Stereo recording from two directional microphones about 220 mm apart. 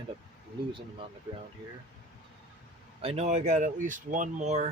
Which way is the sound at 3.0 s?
30° right (ahead or behind).